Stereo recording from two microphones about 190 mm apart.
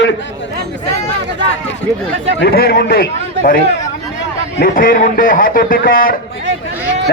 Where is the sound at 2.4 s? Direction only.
55° left (ahead or behind).